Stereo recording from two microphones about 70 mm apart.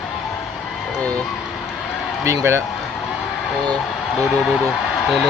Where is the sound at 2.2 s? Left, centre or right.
Right.